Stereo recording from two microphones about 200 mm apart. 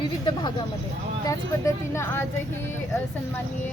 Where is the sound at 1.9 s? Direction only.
15° left (ahead or behind).